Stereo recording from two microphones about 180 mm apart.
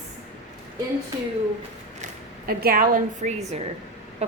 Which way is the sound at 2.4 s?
55° right (ahead or behind).